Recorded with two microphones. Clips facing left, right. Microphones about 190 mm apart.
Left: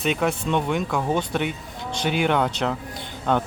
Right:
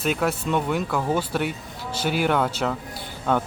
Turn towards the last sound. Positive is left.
turn(degrees=-5)  # may be behind; listen again after turning